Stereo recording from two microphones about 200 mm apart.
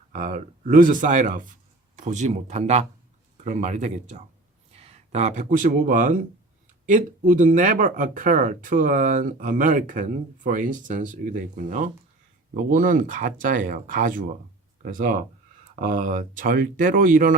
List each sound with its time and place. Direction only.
0.1 s speech: 45° right (ahead or behind)